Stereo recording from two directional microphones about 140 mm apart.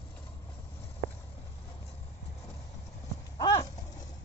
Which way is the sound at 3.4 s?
30° left (ahead or behind).